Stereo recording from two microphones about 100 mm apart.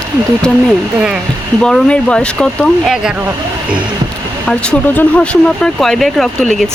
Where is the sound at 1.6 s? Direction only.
10° left (ahead or behind).